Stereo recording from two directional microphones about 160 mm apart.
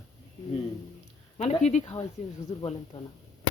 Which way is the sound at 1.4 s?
45° left (ahead or behind).